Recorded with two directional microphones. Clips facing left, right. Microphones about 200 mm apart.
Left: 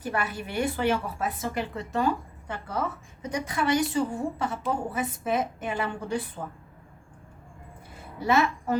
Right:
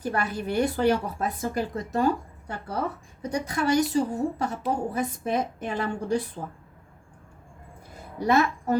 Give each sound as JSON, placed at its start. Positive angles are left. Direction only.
{"t": 0.0, "sound": "a woman's voice", "side_deg": -40}
{"t": 8.3, "sound": "a woman's voice", "side_deg": -40}